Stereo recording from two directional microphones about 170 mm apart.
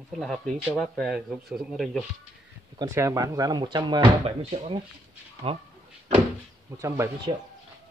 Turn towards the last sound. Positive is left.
turn(degrees=-15)  # may be behind; listen again after turning